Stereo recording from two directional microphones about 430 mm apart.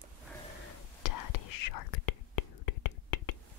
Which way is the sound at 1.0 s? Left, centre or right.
Left.